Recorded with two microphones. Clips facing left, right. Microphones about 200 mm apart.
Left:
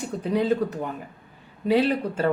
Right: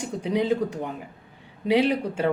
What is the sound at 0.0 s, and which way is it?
Speech, 15° right (ahead or behind).